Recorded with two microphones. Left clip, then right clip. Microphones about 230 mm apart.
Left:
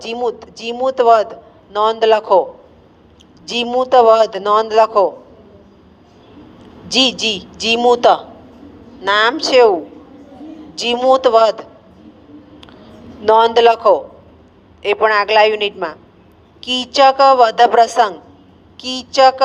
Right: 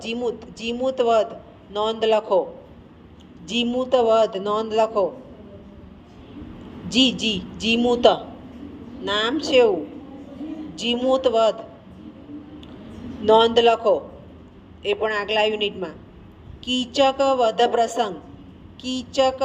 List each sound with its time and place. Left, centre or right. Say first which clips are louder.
0.0 s a man's voice: left 6 dB; left
3.4 s a man's voice: left 7 dB; left
6.6 s a woman's voice: left 6 dB; left
10.8 s a man's voice: left 8 dB; left
12.5 s a sound: left 2 dB; left
13.2 s a man's voice: left 6 dB; left